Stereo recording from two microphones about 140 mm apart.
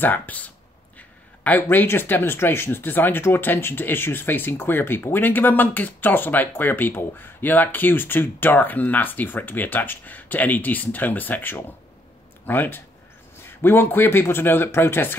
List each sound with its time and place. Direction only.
0.0 s speech: 10° left (ahead or behind)